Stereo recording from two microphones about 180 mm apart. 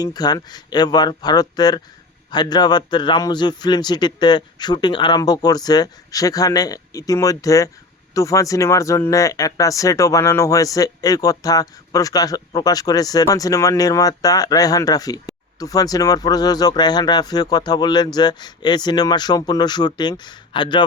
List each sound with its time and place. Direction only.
0.0 s speech: 20° left (ahead or behind)